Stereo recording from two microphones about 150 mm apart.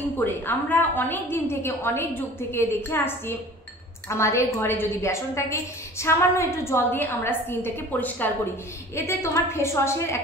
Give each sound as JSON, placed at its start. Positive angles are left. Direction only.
{"t": 0.2, "sound": "a woman's voice", "side_deg": 15}